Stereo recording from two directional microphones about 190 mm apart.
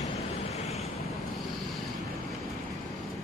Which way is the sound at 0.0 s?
35° left (ahead or behind).